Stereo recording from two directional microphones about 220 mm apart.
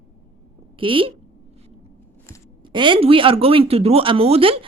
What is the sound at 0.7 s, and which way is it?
Speech, 25° right (ahead or behind).